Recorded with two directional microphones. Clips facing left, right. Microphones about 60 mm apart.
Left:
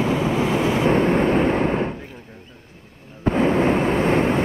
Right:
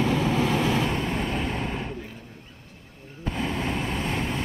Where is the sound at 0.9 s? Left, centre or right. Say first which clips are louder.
Left 10 dB; left.